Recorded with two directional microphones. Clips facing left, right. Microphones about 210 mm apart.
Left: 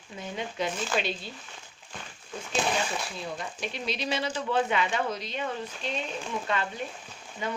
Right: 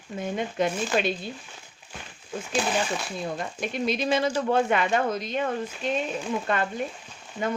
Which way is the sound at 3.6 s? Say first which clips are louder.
Right 8 dB; 50° right (ahead or behind).